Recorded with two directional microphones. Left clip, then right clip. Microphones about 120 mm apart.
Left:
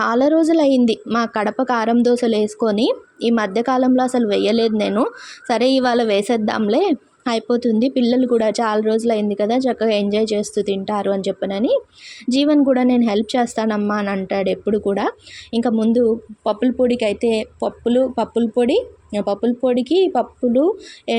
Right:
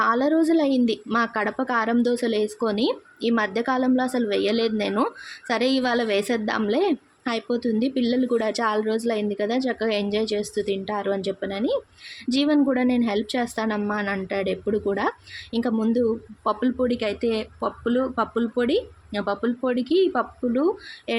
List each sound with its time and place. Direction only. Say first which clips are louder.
0.0 s a woman's voice: left 5 dB; 25° left (ahead or behind)